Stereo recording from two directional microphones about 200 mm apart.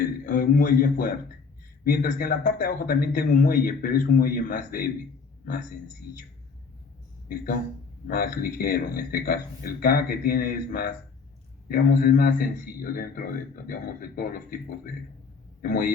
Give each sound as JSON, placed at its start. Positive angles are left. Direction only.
{"t": 0.0, "sound": "a sound", "side_deg": 45}
{"t": 1.8, "sound": "a man's voice", "side_deg": 45}
{"t": 7.3, "sound": "a man's voice", "side_deg": 45}
{"t": 15.6, "sound": "a man's voice", "side_deg": 45}